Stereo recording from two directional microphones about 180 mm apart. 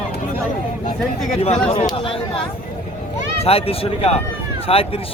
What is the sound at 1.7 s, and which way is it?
A man's voice, 30° left (ahead or behind).